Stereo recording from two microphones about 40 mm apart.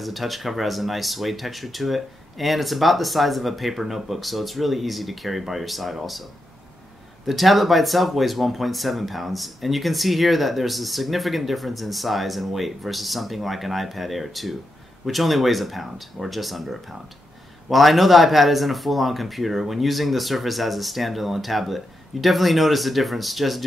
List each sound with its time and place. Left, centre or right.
0.0 s speech: centre
7.2 s speech: centre